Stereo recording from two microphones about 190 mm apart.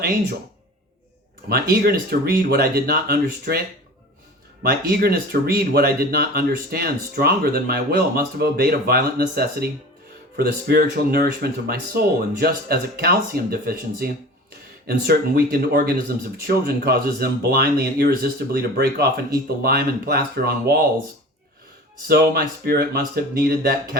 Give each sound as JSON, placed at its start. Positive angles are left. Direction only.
{"t": 1.5, "sound": "speech", "side_deg": -55}
{"t": 4.9, "sound": "speech", "side_deg": -50}
{"t": 22.0, "sound": "speech", "side_deg": -50}